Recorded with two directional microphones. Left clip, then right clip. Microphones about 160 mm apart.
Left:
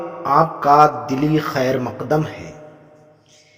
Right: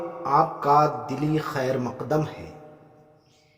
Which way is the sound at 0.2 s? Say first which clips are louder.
Left 6 dB; 30° left (ahead or behind).